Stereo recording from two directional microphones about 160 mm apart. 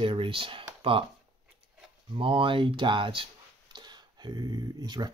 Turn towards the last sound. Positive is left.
turn(degrees=-25)  # may be behind; listen again after turning